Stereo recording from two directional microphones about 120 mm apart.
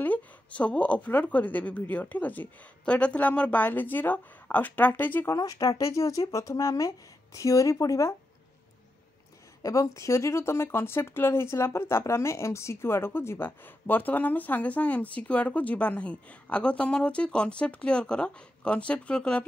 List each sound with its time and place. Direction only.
0.0 s speech: 10° left (ahead or behind)
5.3 s speech: 30° left (ahead or behind)
9.6 s speech: 25° left (ahead or behind); by 19.4 s 10° left (ahead or behind)